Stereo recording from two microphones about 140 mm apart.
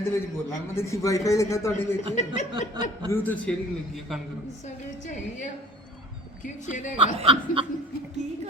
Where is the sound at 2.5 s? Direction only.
35° right (ahead or behind).